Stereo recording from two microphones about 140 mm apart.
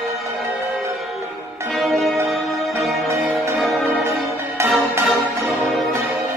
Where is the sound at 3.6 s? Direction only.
Centre (ahead or behind).